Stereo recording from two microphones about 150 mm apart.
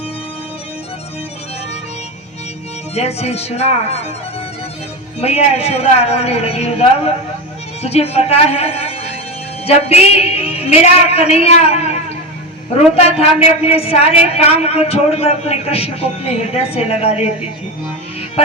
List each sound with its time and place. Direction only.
2.9 s a man's voice: 45° left (ahead or behind)
5.2 s a man's voice: 45° left (ahead or behind)
13.1 s a man's voice: 40° left (ahead or behind)